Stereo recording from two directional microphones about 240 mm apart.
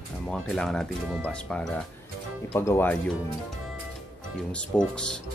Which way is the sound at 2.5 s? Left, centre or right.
Centre.